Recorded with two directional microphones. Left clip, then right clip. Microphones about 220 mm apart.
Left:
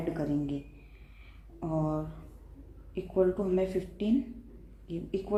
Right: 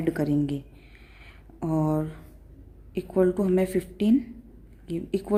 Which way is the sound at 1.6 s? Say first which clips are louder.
Right 6 dB; 45° right (ahead or behind).